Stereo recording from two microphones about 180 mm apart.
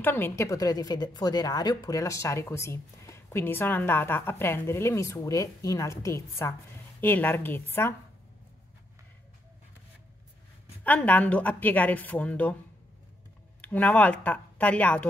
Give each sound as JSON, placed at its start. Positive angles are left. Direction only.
{"t": 0.0, "sound": "a woman's voice", "side_deg": 10}
{"t": 10.8, "sound": "a woman's voice", "side_deg": 10}
{"t": 13.6, "sound": "speech", "side_deg": 10}